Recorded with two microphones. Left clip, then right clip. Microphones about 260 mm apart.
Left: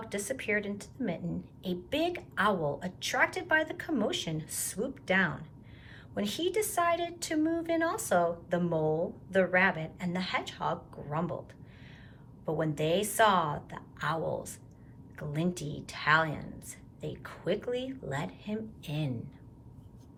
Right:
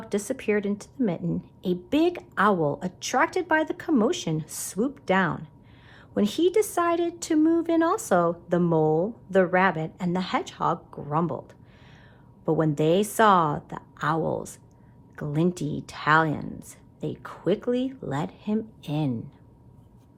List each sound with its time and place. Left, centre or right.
0.1 s speech: right
12.5 s speech: centre